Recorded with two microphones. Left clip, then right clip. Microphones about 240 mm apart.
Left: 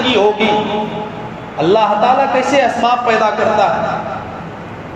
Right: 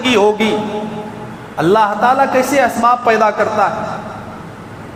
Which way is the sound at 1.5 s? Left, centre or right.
Right.